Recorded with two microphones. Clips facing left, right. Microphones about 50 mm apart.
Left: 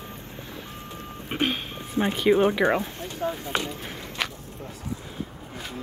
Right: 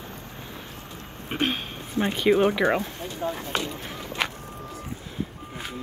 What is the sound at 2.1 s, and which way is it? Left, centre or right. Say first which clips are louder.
Speech: even; centre.